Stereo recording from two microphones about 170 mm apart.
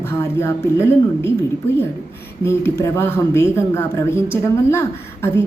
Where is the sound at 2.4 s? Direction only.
15° left (ahead or behind).